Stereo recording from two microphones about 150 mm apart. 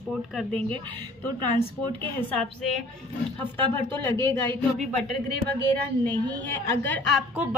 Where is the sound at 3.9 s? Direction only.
15° left (ahead or behind).